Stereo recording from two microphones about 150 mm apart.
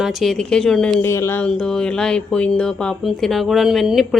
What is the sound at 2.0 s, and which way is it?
A woman's voice, 5° left (ahead or behind).